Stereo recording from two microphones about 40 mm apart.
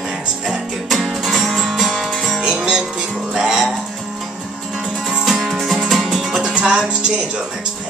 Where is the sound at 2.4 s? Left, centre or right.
Centre.